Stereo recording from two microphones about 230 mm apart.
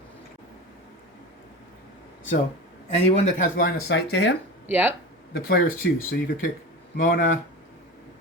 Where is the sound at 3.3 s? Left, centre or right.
Left.